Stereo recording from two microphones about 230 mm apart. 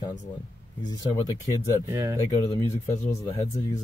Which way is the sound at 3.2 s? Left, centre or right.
Centre.